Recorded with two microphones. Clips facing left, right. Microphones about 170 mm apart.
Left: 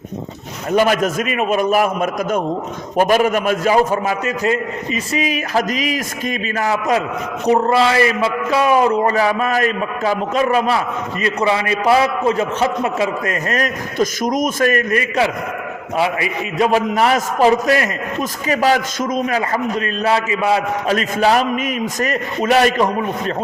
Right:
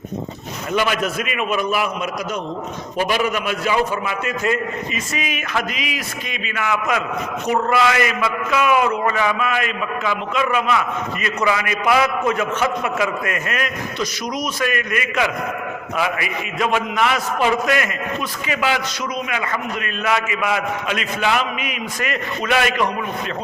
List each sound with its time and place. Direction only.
0.7 s a man's voice: 40° left (ahead or behind)